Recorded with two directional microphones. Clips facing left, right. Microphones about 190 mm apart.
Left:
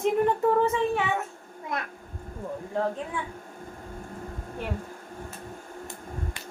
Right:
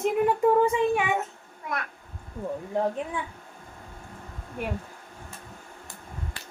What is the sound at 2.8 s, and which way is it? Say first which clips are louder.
Speech: right 1 dB; 15° right (ahead or behind).